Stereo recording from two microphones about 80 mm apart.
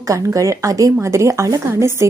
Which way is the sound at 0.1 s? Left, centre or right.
Right.